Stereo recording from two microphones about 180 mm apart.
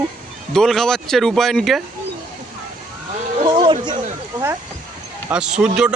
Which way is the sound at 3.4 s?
30° right (ahead or behind).